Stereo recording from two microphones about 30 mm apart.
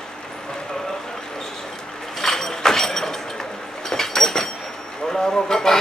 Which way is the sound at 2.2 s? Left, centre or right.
Centre.